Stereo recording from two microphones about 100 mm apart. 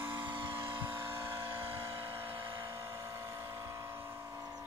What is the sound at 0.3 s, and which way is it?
Vehicle, 55° right (ahead or behind).